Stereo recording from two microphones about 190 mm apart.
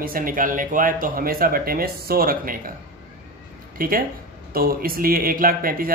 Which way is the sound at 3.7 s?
50° right (ahead or behind).